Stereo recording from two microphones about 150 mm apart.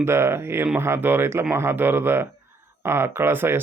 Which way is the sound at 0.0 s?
15° right (ahead or behind).